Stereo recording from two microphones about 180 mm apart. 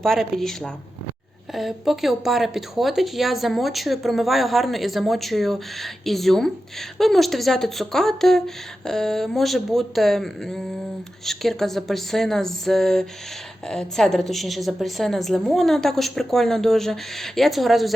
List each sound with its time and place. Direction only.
0.0 s speech: centre (ahead or behind)